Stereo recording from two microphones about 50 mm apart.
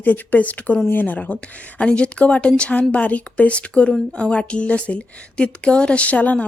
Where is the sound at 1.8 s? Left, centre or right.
Left.